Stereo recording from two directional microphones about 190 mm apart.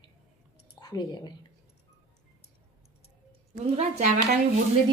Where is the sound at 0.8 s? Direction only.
20° left (ahead or behind).